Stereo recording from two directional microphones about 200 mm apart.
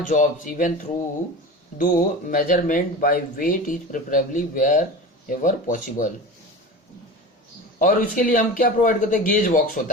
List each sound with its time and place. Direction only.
0.0 s speech: 40° left (ahead or behind)
1.8 s speech: 40° left (ahead or behind)
7.8 s speech: 40° left (ahead or behind)